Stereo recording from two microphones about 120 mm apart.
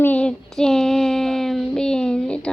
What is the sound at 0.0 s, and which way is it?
Child singing, 10° left (ahead or behind).